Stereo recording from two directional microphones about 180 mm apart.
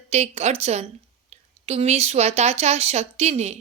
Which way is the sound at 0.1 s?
35° right (ahead or behind).